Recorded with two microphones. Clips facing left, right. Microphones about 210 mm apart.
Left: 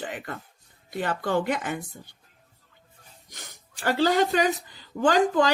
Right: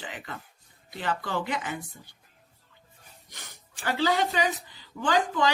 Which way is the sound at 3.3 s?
45° left (ahead or behind).